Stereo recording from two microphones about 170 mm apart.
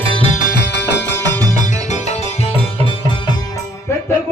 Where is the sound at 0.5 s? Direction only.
80° left.